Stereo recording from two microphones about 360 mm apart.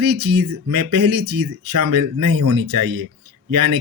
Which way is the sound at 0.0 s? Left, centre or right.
Right.